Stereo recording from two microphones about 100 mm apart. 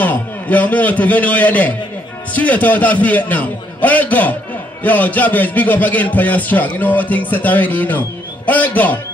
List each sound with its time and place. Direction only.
0.0 s a man's voice: 15° left (ahead or behind)